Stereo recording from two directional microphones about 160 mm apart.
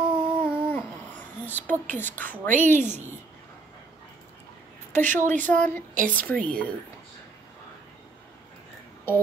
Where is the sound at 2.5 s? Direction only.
50° right (ahead or behind).